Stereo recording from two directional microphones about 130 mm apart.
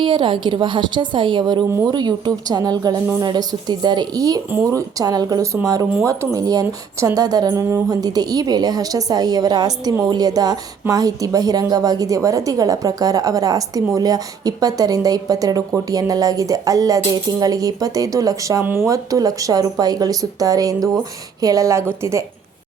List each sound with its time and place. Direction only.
0.0 s a woman's voice: 40° right (ahead or behind); by 22.2 s 20° right (ahead or behind)